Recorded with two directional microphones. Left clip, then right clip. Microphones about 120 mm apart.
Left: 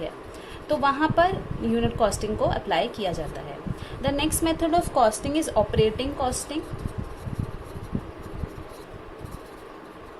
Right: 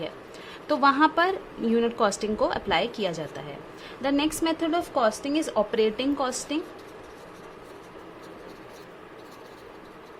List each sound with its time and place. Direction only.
0.7 s a woman's voice: 55° right (ahead or behind)
4.9 s a woman's voice: 30° right (ahead or behind); by 6.6 s 60° right (ahead or behind)